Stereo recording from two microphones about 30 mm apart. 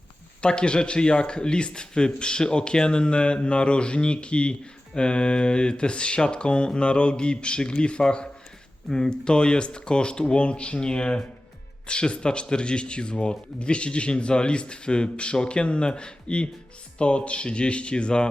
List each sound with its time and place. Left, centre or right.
0.4 s speech: left